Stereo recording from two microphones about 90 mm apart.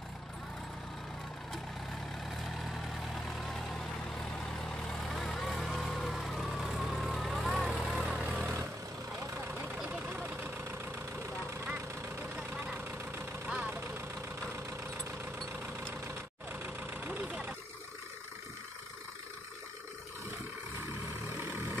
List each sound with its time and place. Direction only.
3.3 s vehicle: 5° left (ahead or behind)
4.6 s vehicle: 5° left (ahead or behind)
8.0 s vehicle: 10° right (ahead or behind)
9.8 s vehicle: 15° right (ahead or behind)
11.6 s vehicle: 20° right (ahead or behind)
16.5 s vehicle: 20° right (ahead or behind)